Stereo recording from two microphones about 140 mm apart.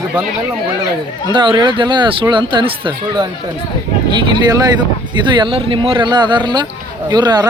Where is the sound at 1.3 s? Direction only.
35° right (ahead or behind).